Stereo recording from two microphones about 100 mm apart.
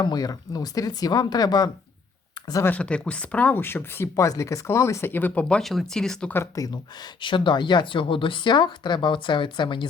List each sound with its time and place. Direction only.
0.0 s speech: 40° left (ahead or behind)
2.6 s speech: 10° left (ahead or behind)
4.1 s speech: 35° left (ahead or behind); by 6.3 s 5° left (ahead or behind)
6.3 s speech: 30° left (ahead or behind)
7.0 s a woman's voice: 55° left (ahead or behind)